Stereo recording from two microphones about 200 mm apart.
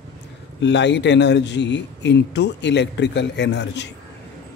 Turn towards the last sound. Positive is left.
turn(degrees=60)  # may be behind; listen again after turning